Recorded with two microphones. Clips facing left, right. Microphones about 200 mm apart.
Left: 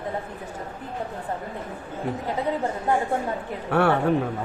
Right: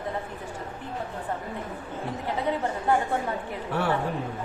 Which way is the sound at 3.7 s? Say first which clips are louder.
Left 7 dB; 65° left (ahead or behind).